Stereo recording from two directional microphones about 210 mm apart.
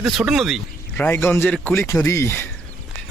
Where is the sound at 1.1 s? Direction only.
10° left (ahead or behind).